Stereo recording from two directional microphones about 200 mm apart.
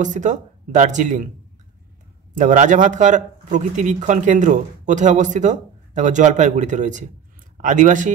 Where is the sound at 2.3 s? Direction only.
40° right (ahead or behind).